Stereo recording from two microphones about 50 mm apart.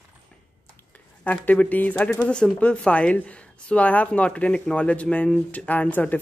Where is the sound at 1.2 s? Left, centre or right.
Left.